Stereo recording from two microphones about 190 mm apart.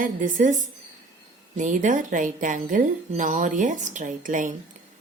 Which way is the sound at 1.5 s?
40° right (ahead or behind).